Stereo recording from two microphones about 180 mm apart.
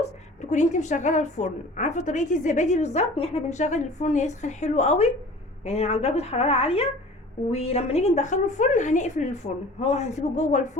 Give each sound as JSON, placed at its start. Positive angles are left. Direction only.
{"t": 0.5, "sound": "a woman's voice", "side_deg": 40}